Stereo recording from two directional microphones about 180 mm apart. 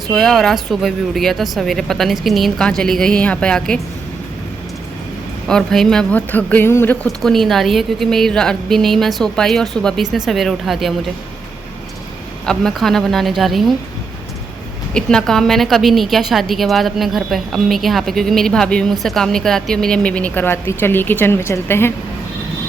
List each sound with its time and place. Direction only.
0.1 s a woman's voice: centre (ahead or behind)
5.5 s a woman's voice: 5° left (ahead or behind)
12.5 s a woman's voice: centre (ahead or behind)
14.9 s a woman's voice: 5° left (ahead or behind)